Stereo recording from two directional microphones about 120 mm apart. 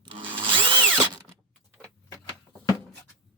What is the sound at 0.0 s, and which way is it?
Drill, 45° right (ahead or behind).